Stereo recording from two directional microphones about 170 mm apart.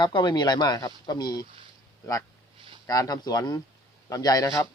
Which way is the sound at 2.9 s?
20° left (ahead or behind).